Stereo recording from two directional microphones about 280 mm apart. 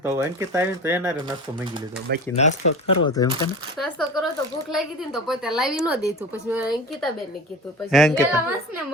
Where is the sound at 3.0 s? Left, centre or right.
Centre.